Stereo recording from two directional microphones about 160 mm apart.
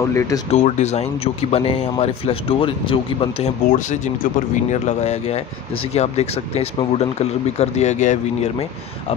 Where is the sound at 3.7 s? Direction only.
50° left (ahead or behind).